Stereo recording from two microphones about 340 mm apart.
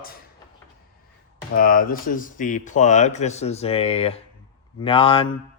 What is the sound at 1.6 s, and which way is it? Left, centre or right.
Speech, left.